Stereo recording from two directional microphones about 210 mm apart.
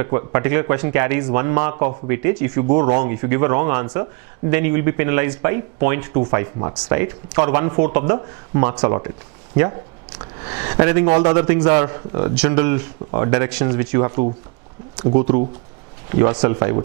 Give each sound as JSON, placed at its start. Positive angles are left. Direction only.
{"t": 0.0, "sound": "speech", "side_deg": -15}
{"t": 10.4, "sound": "speech", "side_deg": -20}